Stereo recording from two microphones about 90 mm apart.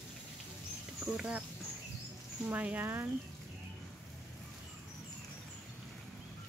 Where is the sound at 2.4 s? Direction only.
20° right (ahead or behind).